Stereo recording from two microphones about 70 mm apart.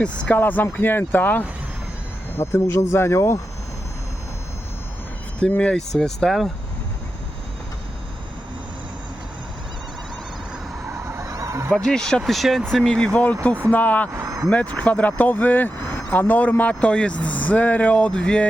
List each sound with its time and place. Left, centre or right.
0.0 s speech: left
2.4 s speech: left
5.4 s speech: centre
10.9 s honk: right
11.7 s speech: centre
13.4 s speech: left
14.1 s a sound: right
14.5 s speech: left